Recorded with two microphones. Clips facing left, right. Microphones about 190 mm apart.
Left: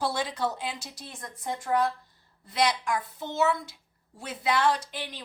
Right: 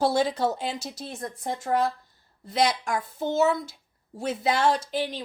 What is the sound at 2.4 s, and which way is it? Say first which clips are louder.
A woman's voice: right 2 dB; 45° right (ahead or behind).